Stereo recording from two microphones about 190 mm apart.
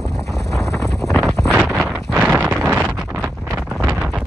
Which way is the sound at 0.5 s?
Centre (ahead or behind).